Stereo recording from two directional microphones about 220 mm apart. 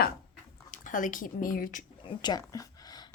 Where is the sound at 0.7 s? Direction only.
35° left (ahead or behind).